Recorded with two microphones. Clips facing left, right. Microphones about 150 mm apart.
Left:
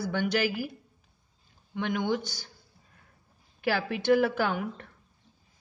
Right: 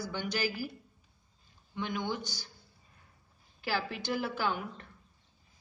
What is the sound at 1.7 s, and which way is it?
Speech, 55° left (ahead or behind).